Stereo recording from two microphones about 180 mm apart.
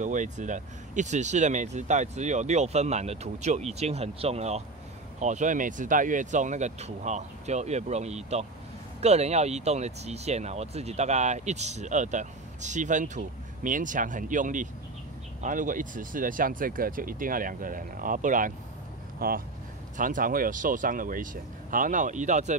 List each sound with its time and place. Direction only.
0.0 s speech: 45° right (ahead or behind)